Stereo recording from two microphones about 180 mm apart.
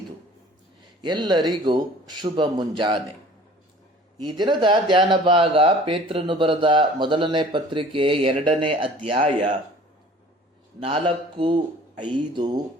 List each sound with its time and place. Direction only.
1.0 s speech: 25° right (ahead or behind)
4.2 s speech: 25° right (ahead or behind)
10.8 s speech: 30° right (ahead or behind)